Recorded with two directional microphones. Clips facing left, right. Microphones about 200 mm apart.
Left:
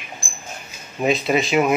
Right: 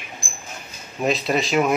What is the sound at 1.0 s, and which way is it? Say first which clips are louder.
Speech: left 2 dB; centre (ahead or behind).